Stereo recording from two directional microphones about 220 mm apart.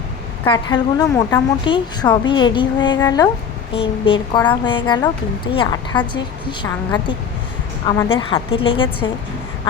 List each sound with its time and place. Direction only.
0.4 s a woman's voice: 20° left (ahead or behind)